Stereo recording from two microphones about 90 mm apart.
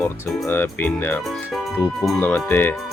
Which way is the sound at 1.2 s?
Centre (ahead or behind).